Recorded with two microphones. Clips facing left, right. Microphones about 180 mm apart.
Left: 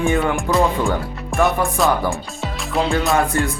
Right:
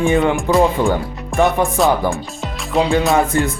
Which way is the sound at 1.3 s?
Centre (ahead or behind).